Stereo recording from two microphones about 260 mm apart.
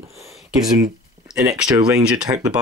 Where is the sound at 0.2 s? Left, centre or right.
Centre.